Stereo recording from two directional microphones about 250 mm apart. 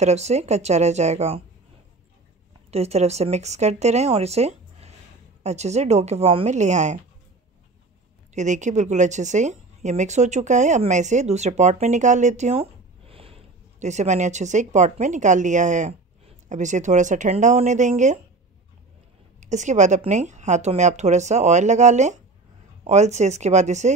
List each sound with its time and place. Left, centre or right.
0.0 s a woman's voice: right
2.7 s a woman's voice: right
8.4 s a woman's voice: right
19.4 s a woman's voice: right